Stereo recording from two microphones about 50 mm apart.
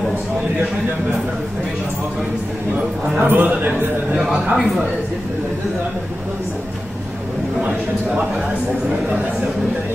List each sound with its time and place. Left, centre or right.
3.2 s speech: right
4.2 s speech: centre